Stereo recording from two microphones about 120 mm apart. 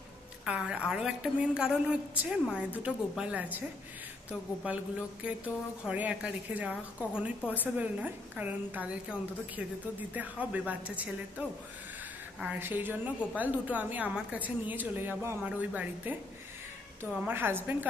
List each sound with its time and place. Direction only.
0.5 s a woman's voice: 10° right (ahead or behind)
4.6 s a woman's voice: 10° right (ahead or behind)
12.5 s a woman's voice: 15° right (ahead or behind)
17.2 s a woman's voice: 15° right (ahead or behind)